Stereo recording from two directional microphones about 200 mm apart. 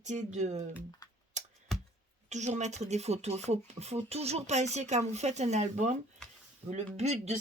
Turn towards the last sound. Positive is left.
turn(degrees=-35)  # may be behind; listen again after turning